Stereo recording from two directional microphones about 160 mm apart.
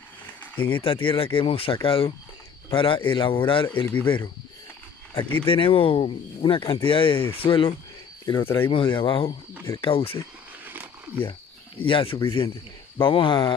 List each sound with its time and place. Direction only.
0.7 s speech: 35° left (ahead or behind)
5.5 s speech: 35° left (ahead or behind)
10.6 s a sound: 10° right (ahead or behind)
11.8 s speech: 35° left (ahead or behind)